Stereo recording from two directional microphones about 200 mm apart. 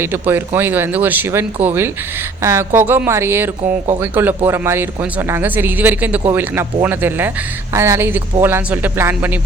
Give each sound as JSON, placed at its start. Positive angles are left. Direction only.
{"t": 0.0, "sound": "speech", "side_deg": -10}